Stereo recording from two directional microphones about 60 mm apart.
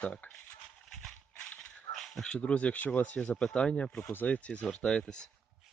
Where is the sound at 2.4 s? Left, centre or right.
Left.